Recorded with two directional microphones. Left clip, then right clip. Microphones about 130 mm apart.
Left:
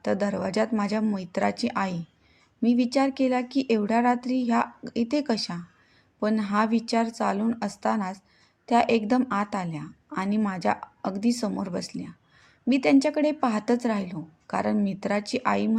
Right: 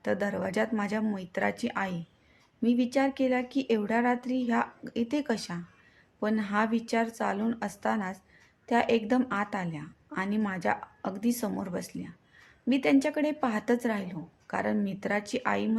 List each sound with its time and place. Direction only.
0.0 s a woman's voice: 25° left (ahead or behind)